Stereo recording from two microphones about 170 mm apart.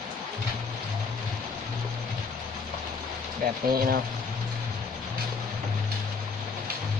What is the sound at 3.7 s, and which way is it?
Speech, 60° right (ahead or behind).